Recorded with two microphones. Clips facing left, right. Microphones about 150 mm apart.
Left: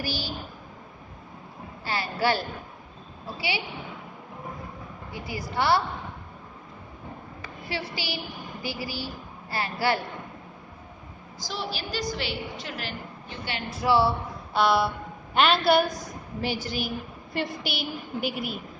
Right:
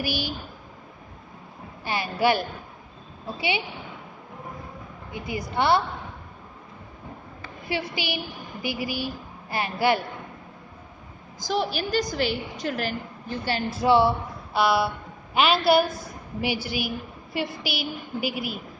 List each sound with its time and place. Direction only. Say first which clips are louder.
0.0 s speech: right 3 dB; 15° right (ahead or behind)
1.8 s speech: right 3 dB; 15° right (ahead or behind)
5.1 s a woman's voice: right 3 dB; 20° right (ahead or behind)
7.7 s a woman's voice: right 4 dB; 15° right (ahead or behind)
11.3 s a woman's voice: right 8 dB; 55° right (ahead or behind)
13.7 s a woman's voice: right 3 dB; 20° right (ahead or behind)
14.5 s a woman's voice: even; 5° right (ahead or behind)